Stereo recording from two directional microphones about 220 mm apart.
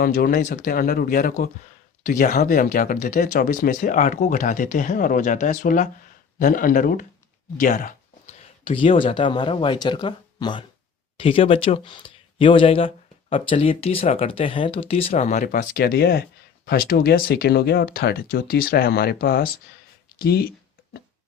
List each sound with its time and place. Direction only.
0.0 s speech: 40° left (ahead or behind)
8.6 s speech: 25° left (ahead or behind); by 20.5 s 45° left (ahead or behind)